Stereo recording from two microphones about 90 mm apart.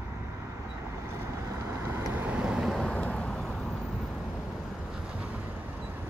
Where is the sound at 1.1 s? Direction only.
30° right (ahead or behind).